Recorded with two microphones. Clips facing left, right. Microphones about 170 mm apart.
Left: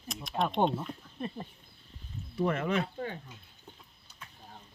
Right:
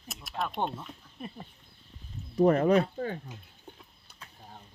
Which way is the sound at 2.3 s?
40° right (ahead or behind).